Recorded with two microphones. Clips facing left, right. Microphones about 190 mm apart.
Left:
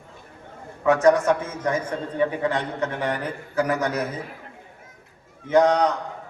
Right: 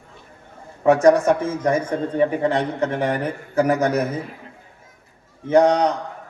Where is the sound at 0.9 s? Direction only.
30° right (ahead or behind).